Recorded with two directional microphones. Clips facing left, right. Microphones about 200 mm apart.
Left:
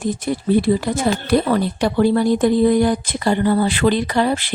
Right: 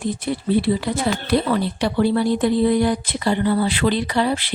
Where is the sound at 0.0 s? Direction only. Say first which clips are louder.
Left 2 dB; 45° left (ahead or behind).